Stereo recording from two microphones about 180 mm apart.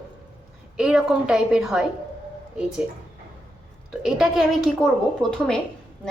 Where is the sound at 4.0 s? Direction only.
Centre (ahead or behind).